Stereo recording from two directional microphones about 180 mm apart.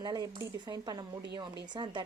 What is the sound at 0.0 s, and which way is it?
A woman's voice, 20° right (ahead or behind).